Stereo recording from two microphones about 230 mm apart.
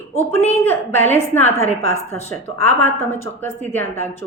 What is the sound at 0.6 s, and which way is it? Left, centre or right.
Speech, centre.